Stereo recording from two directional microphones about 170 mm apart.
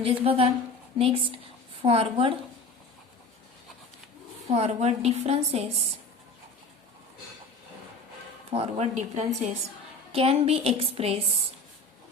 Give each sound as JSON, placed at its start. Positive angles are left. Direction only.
{"t": 0.0, "sound": "a woman's voice", "side_deg": -35}
{"t": 4.4, "sound": "a woman's voice", "side_deg": -40}
{"t": 8.4, "sound": "a woman's voice", "side_deg": -35}